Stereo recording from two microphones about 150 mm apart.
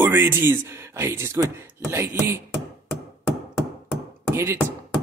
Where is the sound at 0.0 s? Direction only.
15° right (ahead or behind).